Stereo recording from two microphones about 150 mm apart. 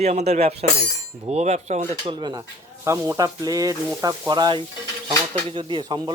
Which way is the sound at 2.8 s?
20° right (ahead or behind).